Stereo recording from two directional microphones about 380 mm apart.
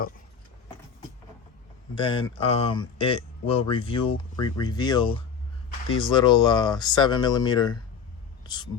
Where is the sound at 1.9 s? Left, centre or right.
Centre.